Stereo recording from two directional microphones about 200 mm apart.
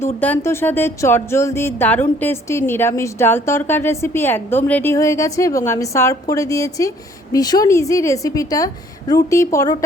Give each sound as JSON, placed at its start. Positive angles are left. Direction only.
{"t": 0.0, "sound": "music", "side_deg": 10}